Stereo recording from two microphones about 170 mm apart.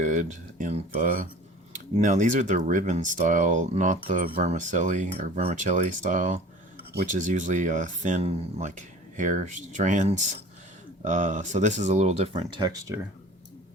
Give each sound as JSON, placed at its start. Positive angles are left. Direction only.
{"t": 0.0, "sound": "speech", "side_deg": -45}
{"t": 4.4, "sound": "speech", "side_deg": -45}